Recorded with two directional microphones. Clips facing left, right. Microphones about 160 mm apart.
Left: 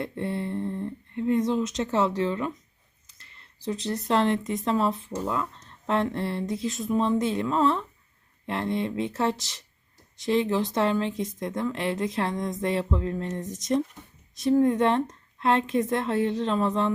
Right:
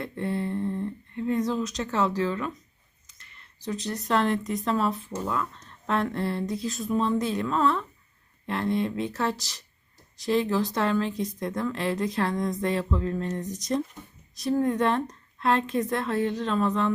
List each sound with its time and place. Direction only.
0.0 s humming: 25° left (ahead or behind)
3.1 s speech: 30° left (ahead or behind)